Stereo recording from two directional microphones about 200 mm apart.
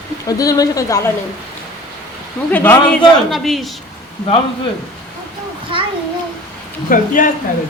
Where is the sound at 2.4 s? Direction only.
10° left (ahead or behind).